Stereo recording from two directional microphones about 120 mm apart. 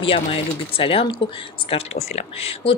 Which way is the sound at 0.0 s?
50° left (ahead or behind).